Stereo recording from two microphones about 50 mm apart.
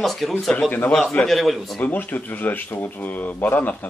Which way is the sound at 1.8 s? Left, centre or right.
Left.